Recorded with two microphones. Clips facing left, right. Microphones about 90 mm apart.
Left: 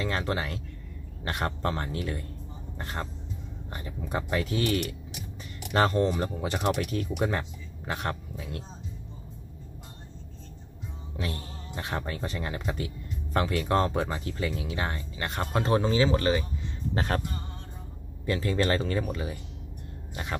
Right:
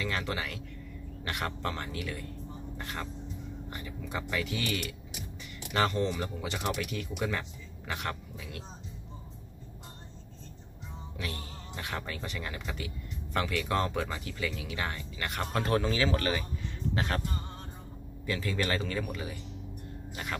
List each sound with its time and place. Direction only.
0.0 s speech: 35° left (ahead or behind)
11.1 s speech: 35° left (ahead or behind)
16.9 s music: 40° left (ahead or behind)
18.2 s speech: 30° left (ahead or behind)